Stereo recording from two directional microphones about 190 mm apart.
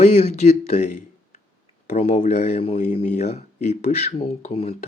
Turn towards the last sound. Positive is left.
turn(degrees=30)  # may be behind; listen again after turning